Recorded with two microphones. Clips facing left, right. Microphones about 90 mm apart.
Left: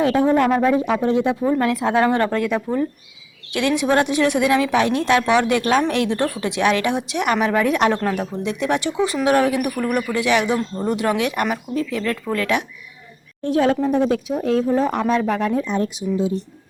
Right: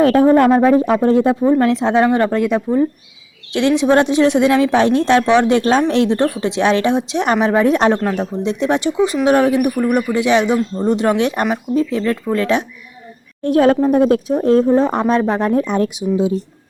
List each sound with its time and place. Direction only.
0.0 s speech: 50° right (ahead or behind)
1.4 s a woman's voice: 25° right (ahead or behind)
13.4 s speech: 55° right (ahead or behind); by 15.5 s 30° right (ahead or behind)
15.5 s speech: 70° right (ahead or behind)